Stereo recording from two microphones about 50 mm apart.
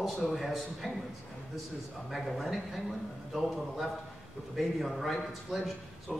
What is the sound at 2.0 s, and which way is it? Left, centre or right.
A man's voice, centre.